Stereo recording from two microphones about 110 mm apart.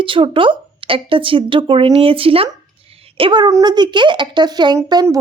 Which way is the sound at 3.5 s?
40° right (ahead or behind).